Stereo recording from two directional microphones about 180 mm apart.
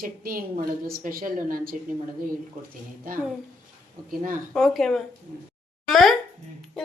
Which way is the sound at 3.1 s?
50° right (ahead or behind).